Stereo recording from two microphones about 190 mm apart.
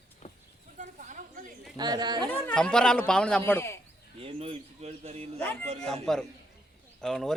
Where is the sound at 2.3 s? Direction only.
5° left (ahead or behind).